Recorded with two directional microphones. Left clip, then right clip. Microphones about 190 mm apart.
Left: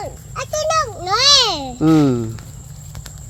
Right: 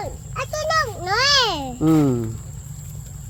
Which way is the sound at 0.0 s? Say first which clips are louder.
Left 1 dB; 30° left (ahead or behind).